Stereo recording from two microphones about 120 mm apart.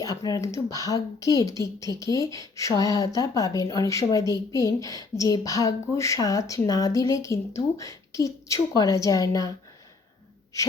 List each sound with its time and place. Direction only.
0.0 s speech: 30° left (ahead or behind)